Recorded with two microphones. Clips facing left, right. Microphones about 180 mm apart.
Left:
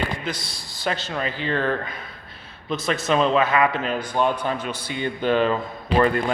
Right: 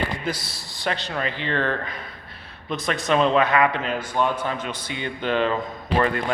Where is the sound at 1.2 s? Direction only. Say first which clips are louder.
Left 2 dB; 40° left (ahead or behind).